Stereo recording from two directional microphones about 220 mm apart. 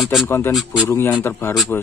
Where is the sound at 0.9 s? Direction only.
10° left (ahead or behind).